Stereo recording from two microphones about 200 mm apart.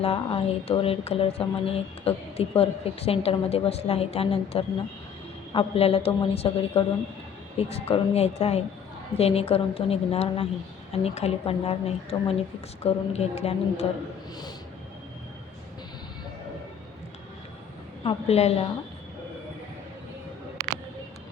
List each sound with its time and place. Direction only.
0.0 s a woman's voice: 30° left (ahead or behind)
18.0 s a woman's voice: 30° left (ahead or behind)